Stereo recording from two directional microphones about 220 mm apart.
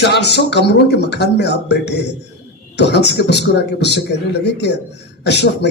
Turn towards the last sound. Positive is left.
turn(degrees=50)  # may be behind; listen again after turning